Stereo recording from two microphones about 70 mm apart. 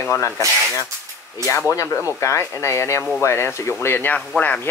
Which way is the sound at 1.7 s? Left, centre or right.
Left.